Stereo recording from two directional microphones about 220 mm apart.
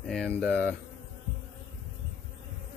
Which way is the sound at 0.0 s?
5° left (ahead or behind).